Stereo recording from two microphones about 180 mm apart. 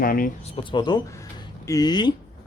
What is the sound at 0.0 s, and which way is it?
Speech, 55° left (ahead or behind).